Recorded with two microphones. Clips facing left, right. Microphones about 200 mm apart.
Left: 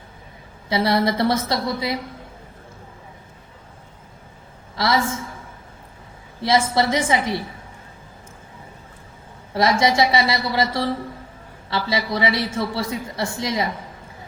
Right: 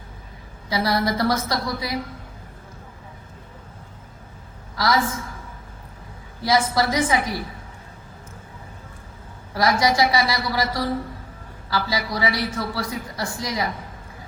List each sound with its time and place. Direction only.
0.7 s a woman's voice: 25° left (ahead or behind)
4.8 s a woman's voice: 25° left (ahead or behind)
6.4 s a woman's voice: 25° left (ahead or behind)
9.5 s a woman's voice: 25° left (ahead or behind)